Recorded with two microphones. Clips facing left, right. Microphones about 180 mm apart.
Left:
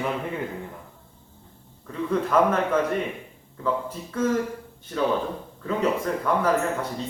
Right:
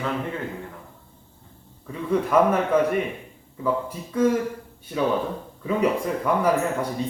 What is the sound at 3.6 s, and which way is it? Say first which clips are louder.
Speech: right 2 dB; 10° right (ahead or behind).